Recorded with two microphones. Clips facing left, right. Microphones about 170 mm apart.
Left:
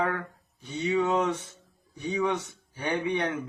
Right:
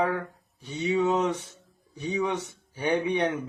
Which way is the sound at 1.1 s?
10° right (ahead or behind).